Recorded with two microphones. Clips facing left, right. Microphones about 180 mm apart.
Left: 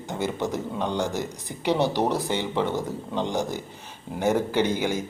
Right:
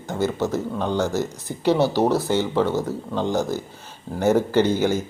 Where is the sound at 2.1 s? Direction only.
5° right (ahead or behind).